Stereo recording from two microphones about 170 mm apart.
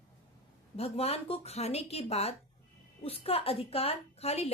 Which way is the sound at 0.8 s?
35° left (ahead or behind).